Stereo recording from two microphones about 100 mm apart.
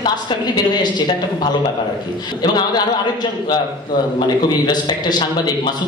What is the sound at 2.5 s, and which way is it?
A man's voice, 45° left (ahead or behind).